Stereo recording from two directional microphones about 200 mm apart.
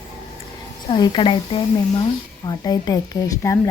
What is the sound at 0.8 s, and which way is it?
A woman's voice, 20° left (ahead or behind).